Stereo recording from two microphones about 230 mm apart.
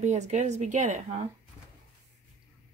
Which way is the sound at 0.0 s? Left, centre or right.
Right.